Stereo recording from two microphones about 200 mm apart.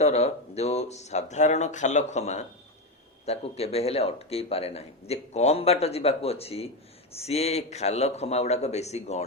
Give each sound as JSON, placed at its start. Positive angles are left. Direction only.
{"t": 0.0, "sound": "speech", "side_deg": 30}